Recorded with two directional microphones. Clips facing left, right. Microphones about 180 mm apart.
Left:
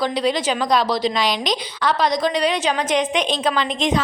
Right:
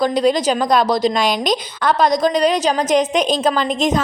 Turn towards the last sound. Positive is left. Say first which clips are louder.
# right 3 dB
turn(degrees=-45)  # may be behind; listen again after turning